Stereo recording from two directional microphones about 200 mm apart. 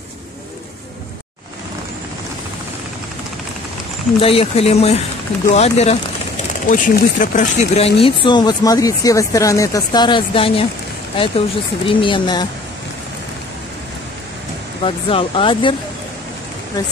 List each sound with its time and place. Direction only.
4.2 s speech: 30° left (ahead or behind)
14.8 s speech: 25° left (ahead or behind)